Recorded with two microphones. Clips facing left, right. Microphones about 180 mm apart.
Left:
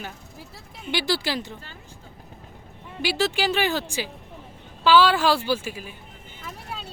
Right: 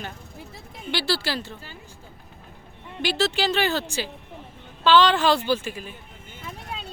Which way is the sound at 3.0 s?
10° left (ahead or behind).